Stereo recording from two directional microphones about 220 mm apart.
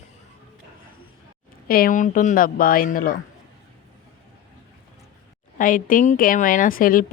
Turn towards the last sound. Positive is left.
turn(degrees=40)  # may be behind; listen again after turning